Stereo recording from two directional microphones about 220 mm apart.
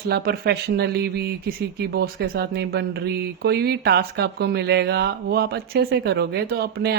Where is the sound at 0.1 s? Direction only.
45° right (ahead or behind).